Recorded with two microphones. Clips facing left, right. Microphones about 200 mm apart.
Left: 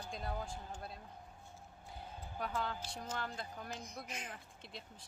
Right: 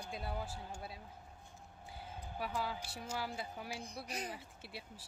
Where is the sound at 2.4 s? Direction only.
5° right (ahead or behind).